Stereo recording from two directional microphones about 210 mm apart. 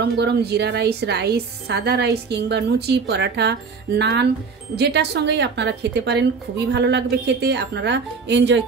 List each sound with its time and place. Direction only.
0.0 s a woman's voice: 50° right (ahead or behind)